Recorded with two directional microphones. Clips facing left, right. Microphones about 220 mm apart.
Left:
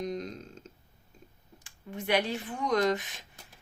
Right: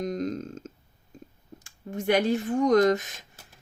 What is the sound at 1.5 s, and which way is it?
Speech, 45° right (ahead or behind).